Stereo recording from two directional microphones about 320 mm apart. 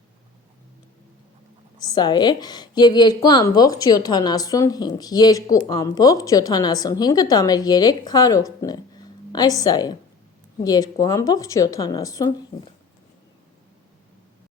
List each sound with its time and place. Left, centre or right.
1.8 s a woman's voice: centre